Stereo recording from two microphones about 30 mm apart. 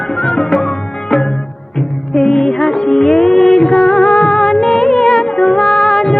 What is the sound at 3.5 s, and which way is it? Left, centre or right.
Music of bollywood, left.